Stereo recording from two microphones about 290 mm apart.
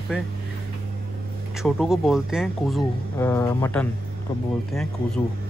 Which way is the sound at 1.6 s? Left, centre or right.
Centre.